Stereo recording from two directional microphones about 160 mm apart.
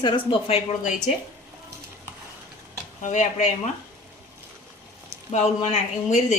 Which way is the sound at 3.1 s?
50° left (ahead or behind).